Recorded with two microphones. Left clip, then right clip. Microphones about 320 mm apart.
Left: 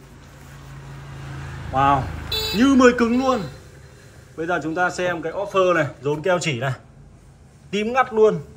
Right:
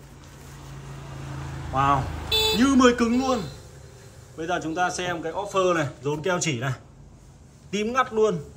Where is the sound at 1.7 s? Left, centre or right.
Centre.